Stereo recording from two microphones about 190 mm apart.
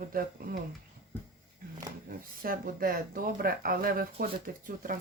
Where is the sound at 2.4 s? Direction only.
50° right (ahead or behind).